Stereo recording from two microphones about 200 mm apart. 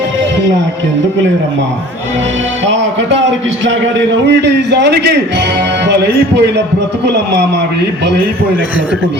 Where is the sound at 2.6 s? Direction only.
65° right (ahead or behind).